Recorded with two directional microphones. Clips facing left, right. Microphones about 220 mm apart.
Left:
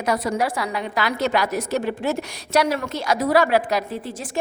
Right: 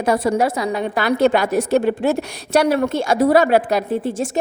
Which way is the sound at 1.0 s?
55° right (ahead or behind).